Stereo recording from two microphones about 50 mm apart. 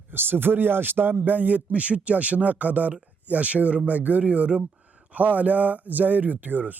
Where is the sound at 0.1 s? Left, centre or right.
Right.